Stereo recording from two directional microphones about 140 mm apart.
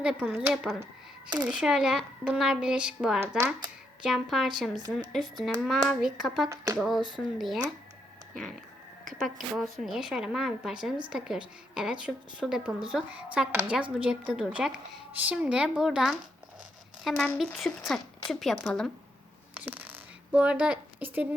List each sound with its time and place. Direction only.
0.0 s a woman's voice: 10° right (ahead or behind)
3.2 s a woman's voice: 20° right (ahead or behind)
4.0 s speech: centre (ahead or behind)
9.2 s a woman's voice: centre (ahead or behind)
19.5 s a sound: 10° right (ahead or behind)